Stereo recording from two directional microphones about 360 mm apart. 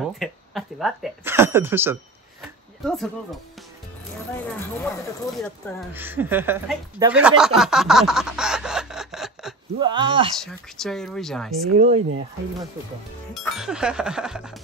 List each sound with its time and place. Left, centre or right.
0.0 s speech: centre
4.5 s speech: centre
9.8 s speech: centre
10.4 s speech: centre
11.7 s speech: centre
13.3 s speech: centre